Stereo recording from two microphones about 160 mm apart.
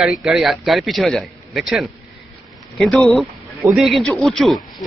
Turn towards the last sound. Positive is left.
turn(degrees=0)  # may be behind; listen again after turning